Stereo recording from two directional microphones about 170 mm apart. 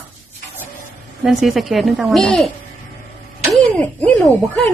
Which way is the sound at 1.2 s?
Centre (ahead or behind).